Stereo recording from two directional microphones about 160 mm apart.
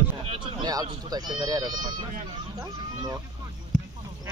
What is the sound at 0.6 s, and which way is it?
Speech, 25° right (ahead or behind).